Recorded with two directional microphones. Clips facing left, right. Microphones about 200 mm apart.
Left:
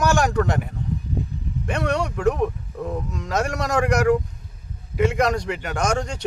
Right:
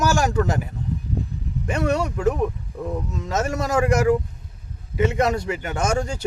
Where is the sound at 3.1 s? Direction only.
5° right (ahead or behind).